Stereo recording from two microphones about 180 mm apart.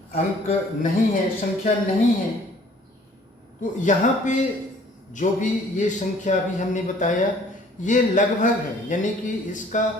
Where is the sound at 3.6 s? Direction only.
45° left (ahead or behind).